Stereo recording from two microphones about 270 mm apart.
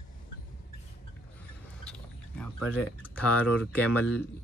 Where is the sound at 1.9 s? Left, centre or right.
Centre.